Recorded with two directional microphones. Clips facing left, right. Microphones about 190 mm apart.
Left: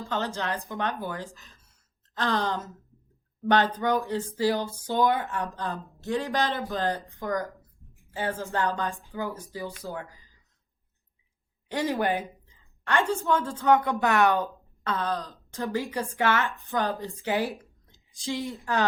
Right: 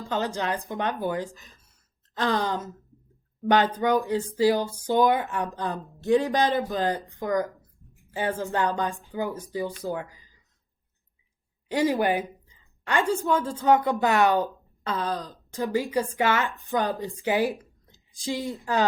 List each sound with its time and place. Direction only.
0.1 s speech: 15° right (ahead or behind)
7.4 s a sound: centre (ahead or behind)
8.1 s speech: 15° right (ahead or behind)
11.7 s speech: 15° right (ahead or behind)
18.6 s speech: 15° right (ahead or behind)